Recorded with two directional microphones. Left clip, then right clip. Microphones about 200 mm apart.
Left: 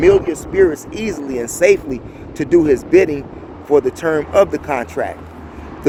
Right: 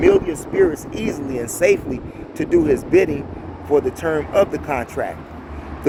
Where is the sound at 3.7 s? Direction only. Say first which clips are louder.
Left 4 dB; 45° left (ahead or behind).